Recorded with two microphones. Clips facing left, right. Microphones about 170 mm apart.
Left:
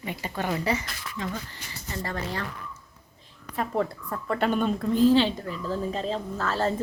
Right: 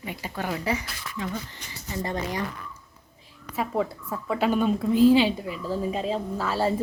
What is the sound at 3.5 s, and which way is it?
A woman's voice, 5° right (ahead or behind).